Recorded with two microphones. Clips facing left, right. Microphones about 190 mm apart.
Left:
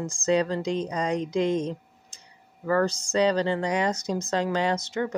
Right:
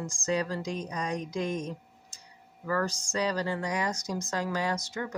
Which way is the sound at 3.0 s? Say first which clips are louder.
Left 8 dB; 65° left (ahead or behind).